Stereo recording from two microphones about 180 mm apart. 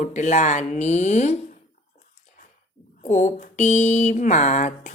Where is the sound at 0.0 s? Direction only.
40° left (ahead or behind).